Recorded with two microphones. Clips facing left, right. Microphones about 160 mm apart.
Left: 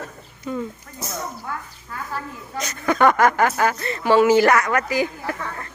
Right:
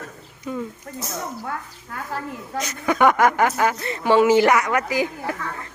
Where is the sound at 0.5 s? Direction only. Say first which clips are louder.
Left 1 dB; 5° right (ahead or behind).